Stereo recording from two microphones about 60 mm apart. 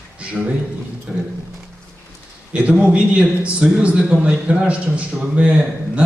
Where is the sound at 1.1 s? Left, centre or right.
Centre.